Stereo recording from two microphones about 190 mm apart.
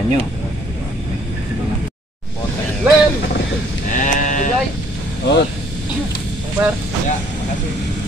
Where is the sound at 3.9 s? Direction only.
40° left (ahead or behind).